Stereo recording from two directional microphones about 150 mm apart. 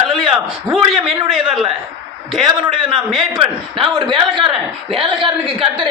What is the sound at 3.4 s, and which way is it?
A man's voice, 35° right (ahead or behind).